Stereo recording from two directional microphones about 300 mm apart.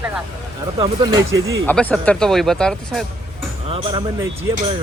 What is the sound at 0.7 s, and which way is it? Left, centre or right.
Speech, centre.